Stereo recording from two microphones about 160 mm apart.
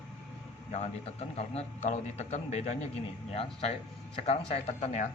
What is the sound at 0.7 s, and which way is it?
A man's voice, 45° left (ahead or behind).